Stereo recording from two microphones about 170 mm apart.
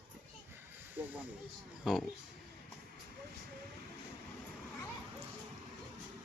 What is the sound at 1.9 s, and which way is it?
Speech, 5° right (ahead or behind).